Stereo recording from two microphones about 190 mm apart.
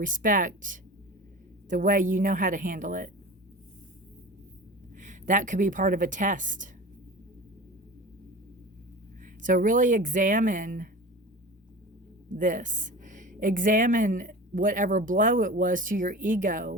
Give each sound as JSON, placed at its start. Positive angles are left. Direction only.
{"t": 0.0, "sound": "speech", "side_deg": -45}
{"t": 4.9, "sound": "speech", "side_deg": -40}
{"t": 9.4, "sound": "speech", "side_deg": -45}
{"t": 12.3, "sound": "speech", "side_deg": -45}